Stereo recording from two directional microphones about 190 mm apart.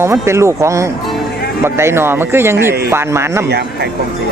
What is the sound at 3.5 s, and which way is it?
Speech, 60° right (ahead or behind).